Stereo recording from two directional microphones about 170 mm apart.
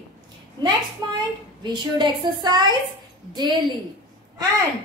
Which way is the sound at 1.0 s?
25° right (ahead or behind).